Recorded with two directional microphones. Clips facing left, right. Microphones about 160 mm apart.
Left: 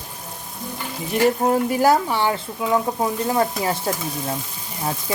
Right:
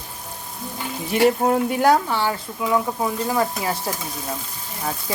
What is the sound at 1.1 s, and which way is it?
Speech, centre (ahead or behind).